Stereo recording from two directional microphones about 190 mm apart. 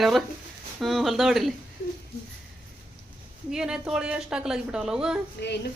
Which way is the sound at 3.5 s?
5° right (ahead or behind).